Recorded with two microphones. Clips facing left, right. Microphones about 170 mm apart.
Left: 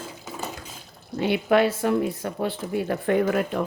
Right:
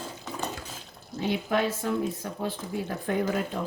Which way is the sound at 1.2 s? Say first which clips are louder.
Left 6 dB; 75° left (ahead or behind).